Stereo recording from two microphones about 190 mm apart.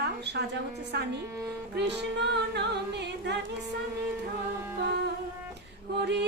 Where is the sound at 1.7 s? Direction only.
65° right (ahead or behind).